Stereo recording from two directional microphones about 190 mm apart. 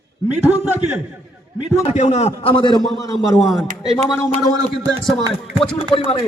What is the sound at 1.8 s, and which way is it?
A man's voice, 35° left (ahead or behind).